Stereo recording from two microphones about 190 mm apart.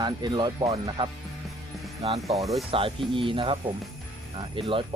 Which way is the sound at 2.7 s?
30° right (ahead or behind).